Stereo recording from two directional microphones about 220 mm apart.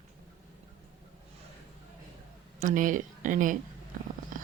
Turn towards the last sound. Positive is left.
turn(degrees=-35)  # may be behind; listen again after turning